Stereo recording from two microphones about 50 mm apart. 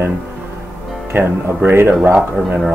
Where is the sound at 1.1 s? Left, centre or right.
Right.